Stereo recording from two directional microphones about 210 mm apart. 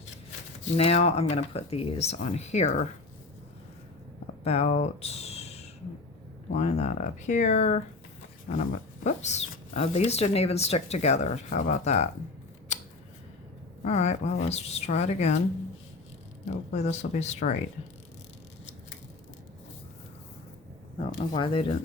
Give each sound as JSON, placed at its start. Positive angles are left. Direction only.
{"t": 0.6, "sound": "speech", "side_deg": 30}
{"t": 4.4, "sound": "a sound", "side_deg": 30}
{"t": 6.5, "sound": "speech", "side_deg": 30}
{"t": 12.7, "sound": "a sound", "side_deg": 35}
{"t": 13.8, "sound": "speech", "side_deg": 30}
{"t": 16.7, "sound": "speech", "side_deg": 30}
{"t": 21.0, "sound": "speech", "side_deg": 25}